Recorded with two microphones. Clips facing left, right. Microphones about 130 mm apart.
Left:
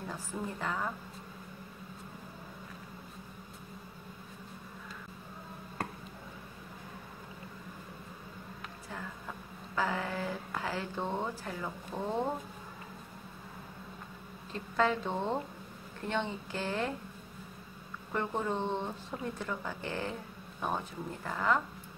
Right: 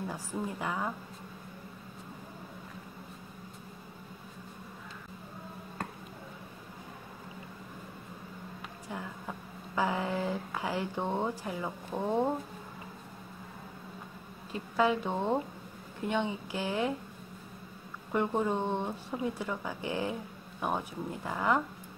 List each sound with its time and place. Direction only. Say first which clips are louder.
0.1 s speech: right 2 dB; 10° right (ahead or behind)
9.8 s speech: right 3 dB; 15° right (ahead or behind)
14.5 s speech: right 2 dB; 15° right (ahead or behind)
18.1 s speech: right 4 dB; 15° right (ahead or behind)